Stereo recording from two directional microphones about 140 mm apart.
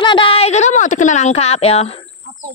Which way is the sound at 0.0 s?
35° left (ahead or behind).